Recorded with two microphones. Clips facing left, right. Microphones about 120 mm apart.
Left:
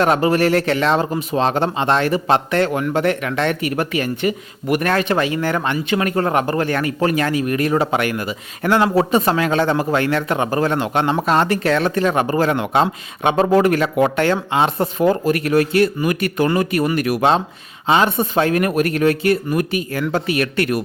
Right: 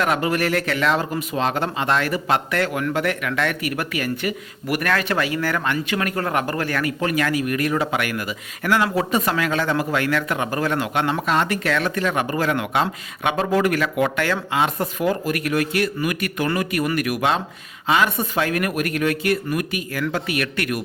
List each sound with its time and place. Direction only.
0.0 s speech: 30° left (ahead or behind)